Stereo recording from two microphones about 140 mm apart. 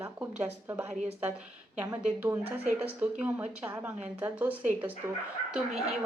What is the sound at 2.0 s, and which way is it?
Speech, 10° right (ahead or behind).